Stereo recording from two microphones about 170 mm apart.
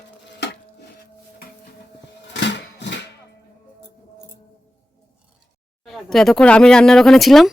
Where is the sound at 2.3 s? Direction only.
90° left.